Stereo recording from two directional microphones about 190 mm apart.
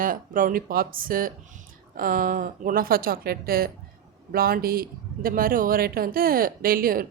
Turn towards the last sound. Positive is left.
turn(degrees=-50)  # may be behind; listen again after turning